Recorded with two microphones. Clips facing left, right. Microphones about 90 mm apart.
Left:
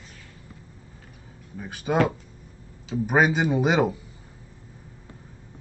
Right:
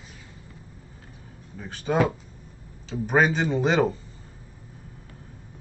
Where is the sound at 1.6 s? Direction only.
10° left (ahead or behind).